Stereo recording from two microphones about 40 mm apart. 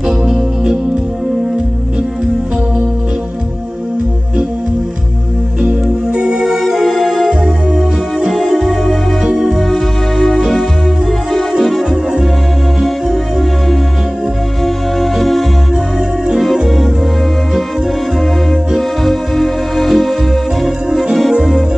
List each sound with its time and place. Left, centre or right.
0.2 s music: centre
5.6 s music: centre
6.4 s music: centre
7.2 s music: centre
9.6 s music: centre
11.6 s music: centre
18.8 s music: centre